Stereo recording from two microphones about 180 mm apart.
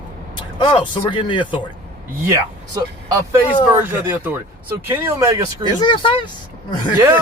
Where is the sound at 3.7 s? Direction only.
10° right (ahead or behind).